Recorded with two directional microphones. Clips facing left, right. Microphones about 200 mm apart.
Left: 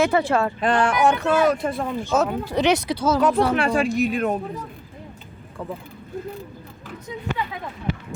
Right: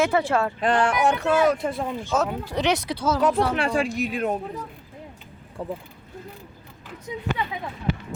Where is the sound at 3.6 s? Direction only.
30° right (ahead or behind).